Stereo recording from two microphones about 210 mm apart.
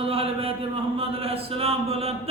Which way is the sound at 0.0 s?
25° right (ahead or behind).